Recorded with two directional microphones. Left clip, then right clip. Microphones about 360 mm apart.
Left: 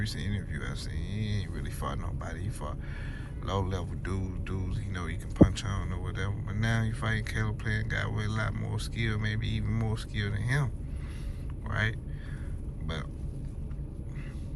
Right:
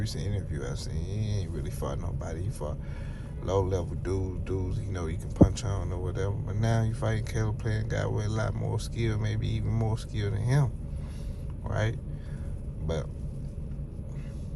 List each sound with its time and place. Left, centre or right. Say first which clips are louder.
0.0 s speech: even; centre
11.7 s speech: left 1 dB; centre